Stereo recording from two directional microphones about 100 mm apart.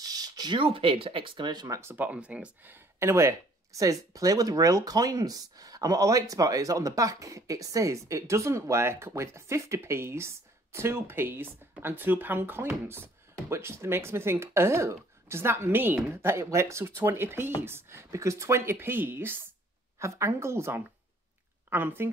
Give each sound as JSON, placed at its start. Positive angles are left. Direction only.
{"t": 0.0, "sound": "a sound", "side_deg": -40}
{"t": 0.6, "sound": "speech", "side_deg": -65}
{"t": 1.8, "sound": "a woman's voice", "side_deg": -20}